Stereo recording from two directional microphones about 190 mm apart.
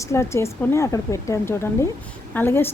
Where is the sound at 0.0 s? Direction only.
15° left (ahead or behind).